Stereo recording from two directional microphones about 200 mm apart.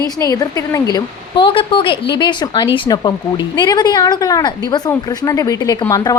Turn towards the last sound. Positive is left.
turn(degrees=20)  # may be behind; listen again after turning